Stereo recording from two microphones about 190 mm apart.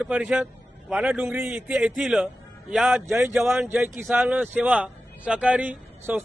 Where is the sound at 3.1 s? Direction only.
15° right (ahead or behind).